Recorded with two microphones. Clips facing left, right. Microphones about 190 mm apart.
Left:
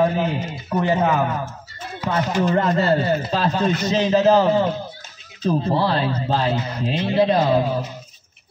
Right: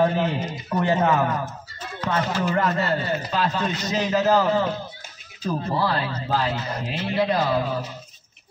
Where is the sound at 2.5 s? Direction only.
30° left (ahead or behind).